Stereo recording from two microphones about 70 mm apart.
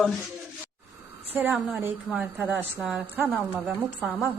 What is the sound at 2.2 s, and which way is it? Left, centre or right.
Speech, centre.